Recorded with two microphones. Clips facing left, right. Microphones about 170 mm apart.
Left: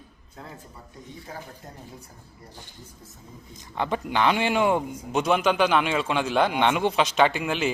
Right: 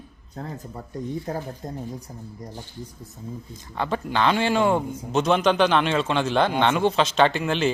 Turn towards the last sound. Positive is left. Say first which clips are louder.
# right 2 dB
turn(degrees=10)  # may be behind; listen again after turning